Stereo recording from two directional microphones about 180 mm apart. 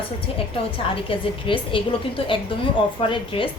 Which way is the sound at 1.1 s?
30° left (ahead or behind).